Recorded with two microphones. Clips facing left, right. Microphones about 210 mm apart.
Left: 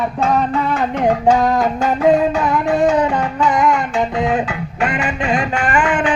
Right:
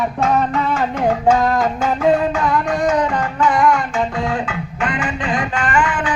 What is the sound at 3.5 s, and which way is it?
Music, 20° left (ahead or behind).